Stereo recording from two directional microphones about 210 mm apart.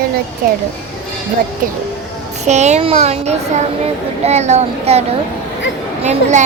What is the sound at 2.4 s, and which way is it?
A child's voice, 35° right (ahead or behind).